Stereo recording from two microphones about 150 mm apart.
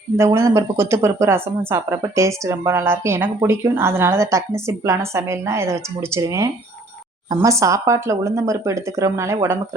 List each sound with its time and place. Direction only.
0.3 s speech: 20° right (ahead or behind)